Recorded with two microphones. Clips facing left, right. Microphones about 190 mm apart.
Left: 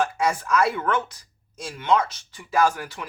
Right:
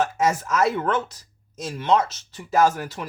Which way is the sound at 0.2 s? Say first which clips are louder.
Right 1 dB; 45° right (ahead or behind).